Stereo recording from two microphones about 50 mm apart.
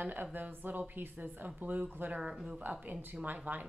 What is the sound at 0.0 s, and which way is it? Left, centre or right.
Speech, right.